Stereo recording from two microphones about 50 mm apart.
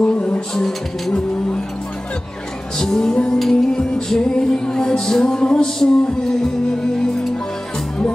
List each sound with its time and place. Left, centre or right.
0.0 s music: left
0.6 s music: centre
2.8 s music: centre